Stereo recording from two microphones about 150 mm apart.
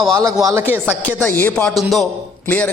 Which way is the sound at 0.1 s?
25° right (ahead or behind).